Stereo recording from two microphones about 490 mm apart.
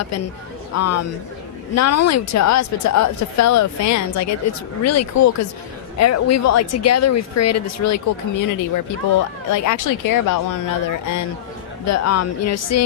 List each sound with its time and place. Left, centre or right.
0.7 s speech: left